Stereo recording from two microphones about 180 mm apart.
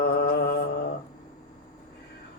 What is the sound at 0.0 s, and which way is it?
Mantra, 60° left (ahead or behind).